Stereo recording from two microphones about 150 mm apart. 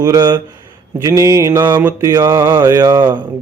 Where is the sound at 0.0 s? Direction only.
25° right (ahead or behind).